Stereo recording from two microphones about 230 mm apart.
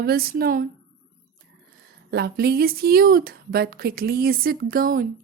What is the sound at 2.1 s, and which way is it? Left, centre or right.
A woman's voice, right.